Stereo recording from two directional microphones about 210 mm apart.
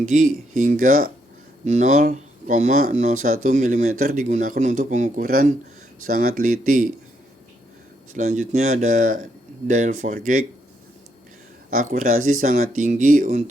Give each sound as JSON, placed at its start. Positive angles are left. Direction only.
{"t": 0.0, "sound": "speech", "side_deg": -35}
{"t": 8.1, "sound": "speech", "side_deg": -35}
{"t": 11.7, "sound": "speech", "side_deg": -40}